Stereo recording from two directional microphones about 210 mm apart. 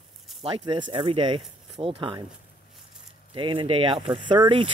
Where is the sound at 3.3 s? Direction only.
25° right (ahead or behind).